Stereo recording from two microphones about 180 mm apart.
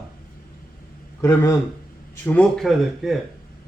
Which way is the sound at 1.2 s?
15° left (ahead or behind).